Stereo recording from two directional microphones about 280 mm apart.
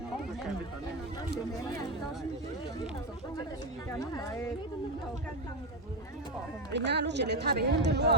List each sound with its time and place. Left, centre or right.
3.9 s speech: centre
6.7 s speech: right